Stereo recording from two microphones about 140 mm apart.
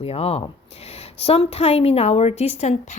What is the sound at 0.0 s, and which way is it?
A woman's voice, 45° left (ahead or behind).